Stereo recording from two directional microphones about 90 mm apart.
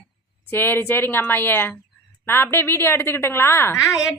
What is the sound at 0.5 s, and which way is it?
A woman's voice, 25° left (ahead or behind).